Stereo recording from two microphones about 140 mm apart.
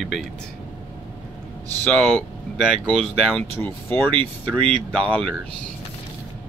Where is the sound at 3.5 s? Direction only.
15° left (ahead or behind).